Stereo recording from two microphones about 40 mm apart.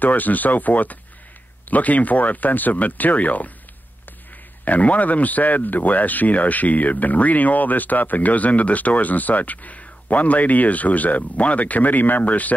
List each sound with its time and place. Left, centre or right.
0.0 s speech: left
4.6 s speech: left